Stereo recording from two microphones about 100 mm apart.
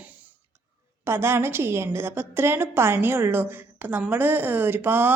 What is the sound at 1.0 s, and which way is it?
A woman's voice, 25° right (ahead or behind).